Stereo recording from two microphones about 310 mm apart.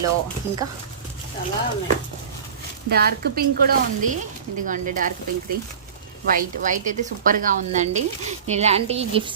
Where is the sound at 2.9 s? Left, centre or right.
Right.